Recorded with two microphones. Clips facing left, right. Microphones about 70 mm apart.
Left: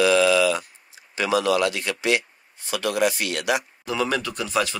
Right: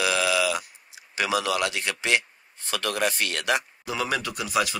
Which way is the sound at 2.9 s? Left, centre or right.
Right.